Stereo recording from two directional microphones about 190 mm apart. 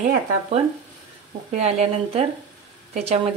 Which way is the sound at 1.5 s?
35° right (ahead or behind).